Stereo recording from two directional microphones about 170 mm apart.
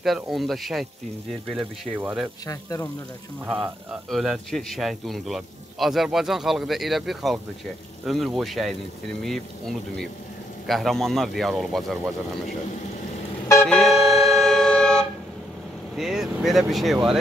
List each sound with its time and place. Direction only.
0.0 s a man's voice: centre (ahead or behind)
2.4 s speech: 20° left (ahead or behind)
3.4 s a man's voice: 5° right (ahead or behind)
13.7 s music: 5° left (ahead or behind)
16.0 s a man's voice: 5° right (ahead or behind)